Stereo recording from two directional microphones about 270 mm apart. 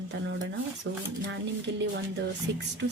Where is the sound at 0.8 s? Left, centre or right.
Right.